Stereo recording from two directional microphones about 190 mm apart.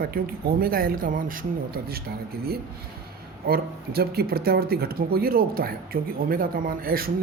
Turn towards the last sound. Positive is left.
turn(degrees=-50)  # may be behind; listen again after turning